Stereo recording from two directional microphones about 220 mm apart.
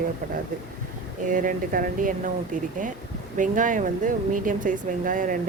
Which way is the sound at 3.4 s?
35° right (ahead or behind).